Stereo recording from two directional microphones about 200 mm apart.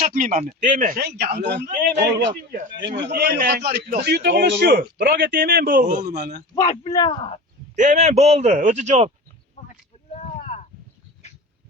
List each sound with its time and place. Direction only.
0.1 s speech: 40° right (ahead or behind)
2.8 s a man's voice: 60° right (ahead or behind)
6.5 s speech: 20° left (ahead or behind)
7.8 s a man's voice: 35° right (ahead or behind)
10.1 s a sound: 35° left (ahead or behind)